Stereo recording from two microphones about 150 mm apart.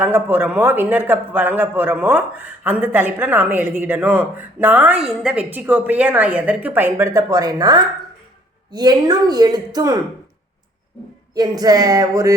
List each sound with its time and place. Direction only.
0.0 s a man's voice: 15° right (ahead or behind)
11.3 s a woman's voice: 25° right (ahead or behind)